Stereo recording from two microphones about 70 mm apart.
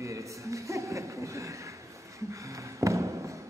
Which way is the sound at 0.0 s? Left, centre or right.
Right.